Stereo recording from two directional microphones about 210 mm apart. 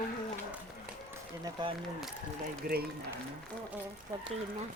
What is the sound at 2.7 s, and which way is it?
Speech, 45° right (ahead or behind).